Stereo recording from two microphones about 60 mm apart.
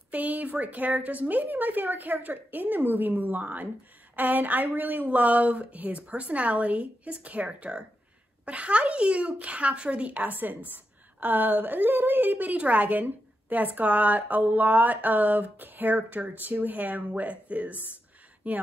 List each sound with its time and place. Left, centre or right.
0.1 s a woman's voice: right